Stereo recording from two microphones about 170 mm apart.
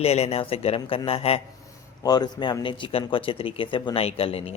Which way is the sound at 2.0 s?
25° left (ahead or behind).